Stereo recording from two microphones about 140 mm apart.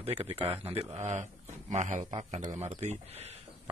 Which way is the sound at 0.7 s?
55° right (ahead or behind).